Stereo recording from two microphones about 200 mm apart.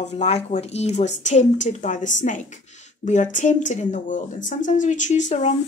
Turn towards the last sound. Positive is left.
turn(degrees=35)  # may be behind; listen again after turning